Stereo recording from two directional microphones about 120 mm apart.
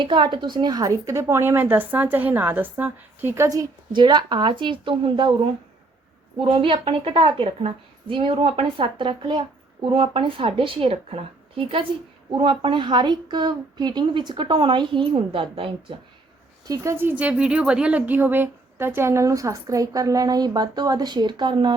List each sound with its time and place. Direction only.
0.0 s a woman's voice: 40° right (ahead or behind)
6.4 s a woman's voice: 45° right (ahead or behind)
16.6 s a woman's voice: 25° right (ahead or behind)